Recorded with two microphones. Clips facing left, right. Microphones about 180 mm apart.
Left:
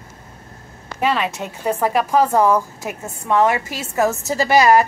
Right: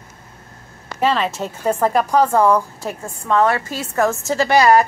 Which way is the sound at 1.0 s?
10° left (ahead or behind).